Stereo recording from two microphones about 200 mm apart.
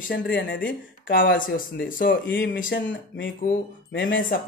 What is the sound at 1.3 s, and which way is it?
Speech, 45° left (ahead or behind).